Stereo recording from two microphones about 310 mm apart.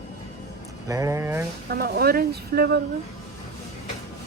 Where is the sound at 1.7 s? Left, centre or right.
Right.